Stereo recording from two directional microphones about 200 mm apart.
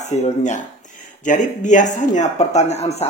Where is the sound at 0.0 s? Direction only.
35° left (ahead or behind).